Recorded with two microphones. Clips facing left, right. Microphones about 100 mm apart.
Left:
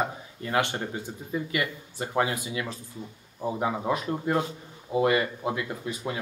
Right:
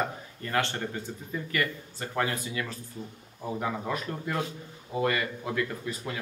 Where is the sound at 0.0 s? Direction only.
15° left (ahead or behind).